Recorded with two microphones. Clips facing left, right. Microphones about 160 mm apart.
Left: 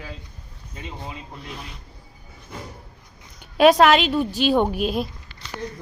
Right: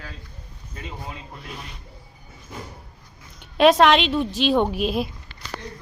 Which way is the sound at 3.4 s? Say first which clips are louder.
Left 1 dB; centre (ahead or behind).